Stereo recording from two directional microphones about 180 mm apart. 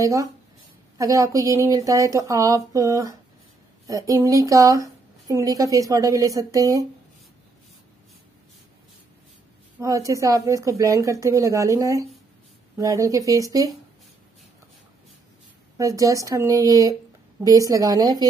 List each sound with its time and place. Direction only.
0.0 s a woman's voice: 20° right (ahead or behind)
9.8 s a woman's voice: 15° right (ahead or behind)
15.8 s a woman's voice: 20° right (ahead or behind)